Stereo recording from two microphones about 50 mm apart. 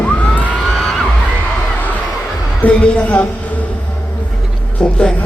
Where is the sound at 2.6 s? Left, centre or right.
Left.